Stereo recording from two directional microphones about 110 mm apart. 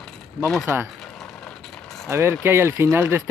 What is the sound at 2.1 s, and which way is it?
Speech, 25° right (ahead or behind).